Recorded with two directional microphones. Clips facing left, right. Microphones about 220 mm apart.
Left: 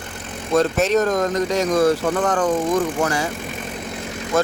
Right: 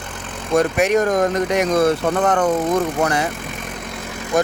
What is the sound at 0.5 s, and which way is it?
Speech, 15° right (ahead or behind).